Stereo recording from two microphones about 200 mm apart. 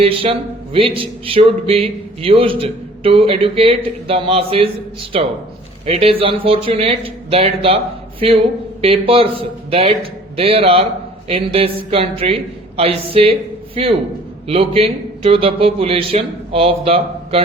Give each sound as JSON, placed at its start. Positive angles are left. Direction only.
{"t": 0.0, "sound": "a man's voice", "side_deg": -30}
{"t": 5.8, "sound": "a man's voice", "side_deg": -30}
{"t": 8.8, "sound": "a man's voice", "side_deg": -30}
{"t": 14.4, "sound": "a man's voice", "side_deg": -30}